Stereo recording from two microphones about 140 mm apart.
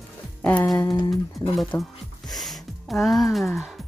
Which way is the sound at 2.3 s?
Centre (ahead or behind).